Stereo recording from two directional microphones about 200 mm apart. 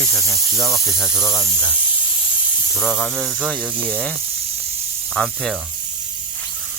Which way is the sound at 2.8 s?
5° left (ahead or behind).